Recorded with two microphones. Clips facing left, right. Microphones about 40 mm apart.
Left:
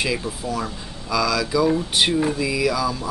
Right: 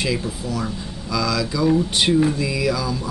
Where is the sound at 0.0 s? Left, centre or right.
Centre.